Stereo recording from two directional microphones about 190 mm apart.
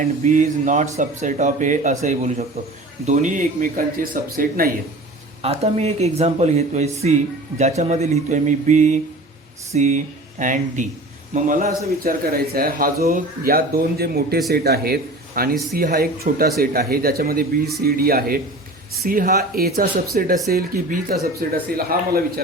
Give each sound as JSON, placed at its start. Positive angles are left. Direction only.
{"t": 0.2, "sound": "speech", "side_deg": -40}
{"t": 5.4, "sound": "a man's voice", "side_deg": -35}